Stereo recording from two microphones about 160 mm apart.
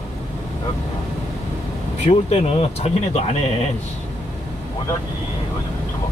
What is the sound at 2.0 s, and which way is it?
Speech, 40° left (ahead or behind).